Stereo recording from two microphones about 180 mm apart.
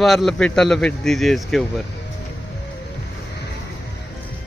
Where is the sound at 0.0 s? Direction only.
Centre (ahead or behind).